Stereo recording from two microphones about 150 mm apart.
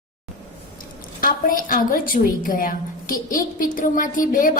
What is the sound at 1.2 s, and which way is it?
A woman's voice, 65° left (ahead or behind).